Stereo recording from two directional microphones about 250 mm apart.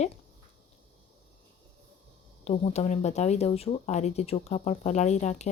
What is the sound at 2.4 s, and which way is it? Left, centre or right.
Speech, left.